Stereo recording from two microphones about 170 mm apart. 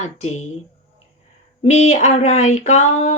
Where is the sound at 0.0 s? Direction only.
40° left (ahead or behind).